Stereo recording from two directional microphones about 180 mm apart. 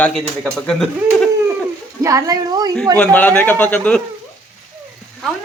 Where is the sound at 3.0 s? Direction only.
10° left (ahead or behind).